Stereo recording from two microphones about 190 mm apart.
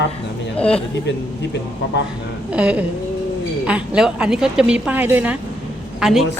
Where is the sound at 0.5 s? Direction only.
5° left (ahead or behind).